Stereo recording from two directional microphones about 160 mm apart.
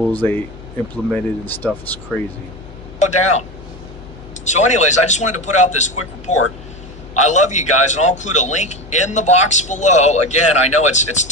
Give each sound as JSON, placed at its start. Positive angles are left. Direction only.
{"t": 0.1, "sound": "speech", "side_deg": 10}
{"t": 3.0, "sound": "speech", "side_deg": 45}
{"t": 4.5, "sound": "a man's voice", "side_deg": 45}